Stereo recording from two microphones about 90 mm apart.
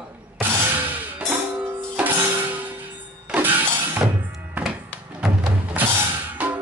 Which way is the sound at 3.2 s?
20° right (ahead or behind).